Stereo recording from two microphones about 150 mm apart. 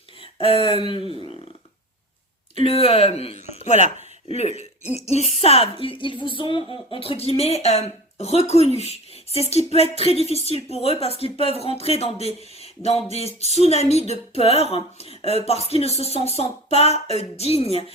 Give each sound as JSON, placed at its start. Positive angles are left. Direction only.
{"t": 0.2, "sound": "a sound", "side_deg": 40}
{"t": 2.6, "sound": "speech", "side_deg": 40}
{"t": 3.7, "sound": "speech", "side_deg": -55}
{"t": 4.3, "sound": "speech", "side_deg": 45}